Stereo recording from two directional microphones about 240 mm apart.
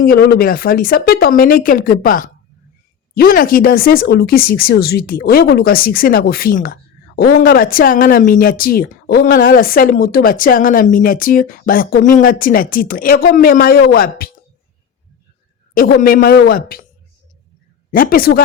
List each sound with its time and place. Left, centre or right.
0.0 s speech: left
15.7 s speech: left
17.9 s speech: left